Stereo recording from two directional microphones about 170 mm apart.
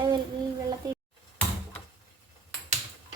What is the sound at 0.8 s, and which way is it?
Stir, 20° right (ahead or behind).